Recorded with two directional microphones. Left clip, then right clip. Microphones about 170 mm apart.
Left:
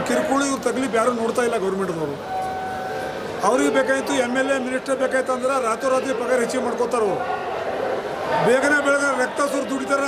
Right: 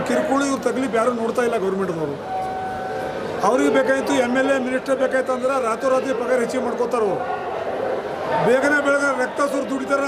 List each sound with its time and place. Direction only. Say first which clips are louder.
0.1 s a man's voice: right 1 dB; 5° right (ahead or behind)
3.4 s a man's voice: right 1 dB; 5° right (ahead or behind)
8.3 s a man's voice: even; 5° right (ahead or behind)